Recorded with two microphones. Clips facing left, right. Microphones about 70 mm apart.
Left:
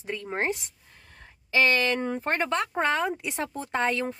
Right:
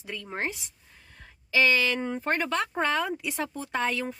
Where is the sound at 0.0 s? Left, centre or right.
Left.